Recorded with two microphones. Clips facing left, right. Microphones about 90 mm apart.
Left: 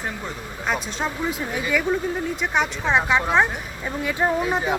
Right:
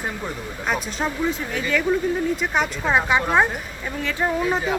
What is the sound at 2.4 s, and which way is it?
Speech, centre (ahead or behind).